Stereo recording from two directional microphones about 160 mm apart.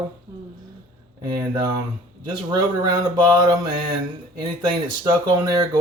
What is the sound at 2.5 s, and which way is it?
Speech, 25° right (ahead or behind).